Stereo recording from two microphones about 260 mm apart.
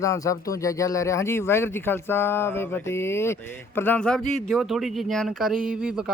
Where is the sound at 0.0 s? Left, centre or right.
Centre.